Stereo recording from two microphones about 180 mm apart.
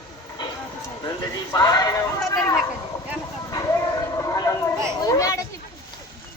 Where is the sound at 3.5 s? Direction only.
20° left (ahead or behind).